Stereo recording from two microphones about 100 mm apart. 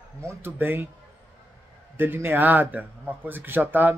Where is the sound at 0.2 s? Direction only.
25° right (ahead or behind).